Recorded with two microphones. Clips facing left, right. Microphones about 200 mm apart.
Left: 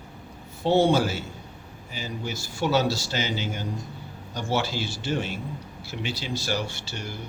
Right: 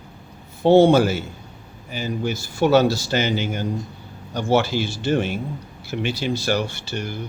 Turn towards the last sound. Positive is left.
turn(degrees=-55)  # may be behind; listen again after turning